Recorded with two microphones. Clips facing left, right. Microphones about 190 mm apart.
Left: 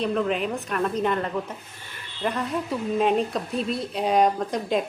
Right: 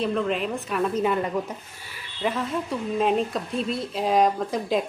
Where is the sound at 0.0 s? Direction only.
Centre (ahead or behind).